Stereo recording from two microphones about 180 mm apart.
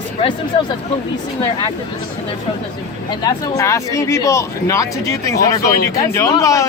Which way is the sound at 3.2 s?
15° left (ahead or behind).